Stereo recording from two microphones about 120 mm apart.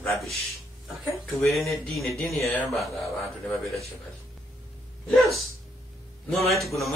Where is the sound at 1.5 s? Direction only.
Centre (ahead or behind).